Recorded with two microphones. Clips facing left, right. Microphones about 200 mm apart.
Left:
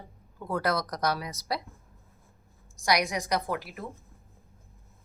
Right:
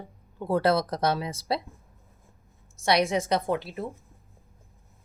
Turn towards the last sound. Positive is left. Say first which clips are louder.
# right 4 dB
turn(degrees=-25)  # may be behind; listen again after turning